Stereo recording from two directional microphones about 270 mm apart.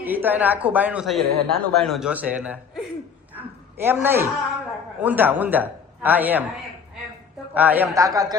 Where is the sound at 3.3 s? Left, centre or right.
Centre.